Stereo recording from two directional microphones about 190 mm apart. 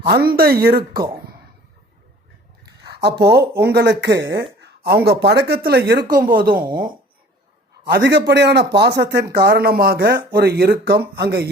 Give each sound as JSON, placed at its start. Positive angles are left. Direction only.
{"t": 0.2, "sound": "speech", "side_deg": -55}
{"t": 2.9, "sound": "speech", "side_deg": -60}
{"t": 7.9, "sound": "speech", "side_deg": -65}